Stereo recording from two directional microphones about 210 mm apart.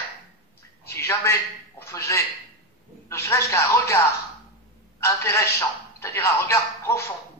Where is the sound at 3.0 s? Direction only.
15° left (ahead or behind).